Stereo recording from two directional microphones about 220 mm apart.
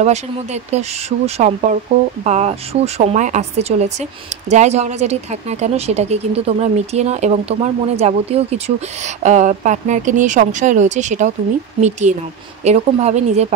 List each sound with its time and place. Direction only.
0.0 s speech: 30° right (ahead or behind)